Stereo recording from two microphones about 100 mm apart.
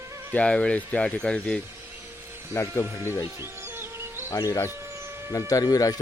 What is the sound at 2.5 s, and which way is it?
Speech, 30° left (ahead or behind).